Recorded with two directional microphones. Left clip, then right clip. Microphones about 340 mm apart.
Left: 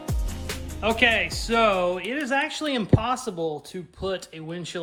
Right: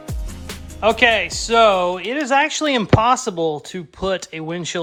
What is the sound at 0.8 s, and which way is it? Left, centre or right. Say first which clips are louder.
Speech: right 6 dB; centre.